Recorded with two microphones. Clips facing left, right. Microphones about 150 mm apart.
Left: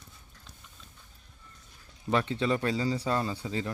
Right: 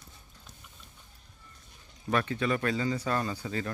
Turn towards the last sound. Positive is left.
turn(degrees=20)  # may be behind; listen again after turning